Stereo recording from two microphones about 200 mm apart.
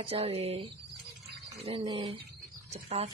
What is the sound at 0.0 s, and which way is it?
Speech, 30° right (ahead or behind).